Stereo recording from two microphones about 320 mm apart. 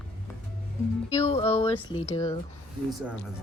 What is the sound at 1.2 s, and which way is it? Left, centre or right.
Speech, centre.